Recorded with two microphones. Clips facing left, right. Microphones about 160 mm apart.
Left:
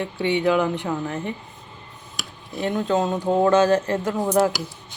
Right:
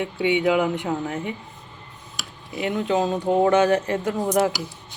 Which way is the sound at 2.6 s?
15° right (ahead or behind).